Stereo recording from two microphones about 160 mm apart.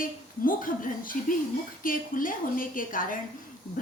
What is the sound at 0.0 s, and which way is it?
A woman's voice, 60° left (ahead or behind).